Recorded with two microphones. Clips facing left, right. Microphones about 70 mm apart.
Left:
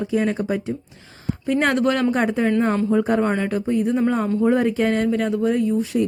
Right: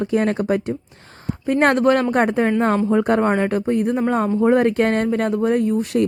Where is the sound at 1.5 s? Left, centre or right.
Right.